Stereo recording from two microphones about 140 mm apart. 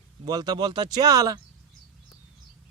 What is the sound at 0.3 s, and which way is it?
A man's voice, 30° right (ahead or behind).